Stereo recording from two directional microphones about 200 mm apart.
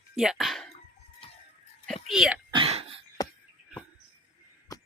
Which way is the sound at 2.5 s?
30° right (ahead or behind).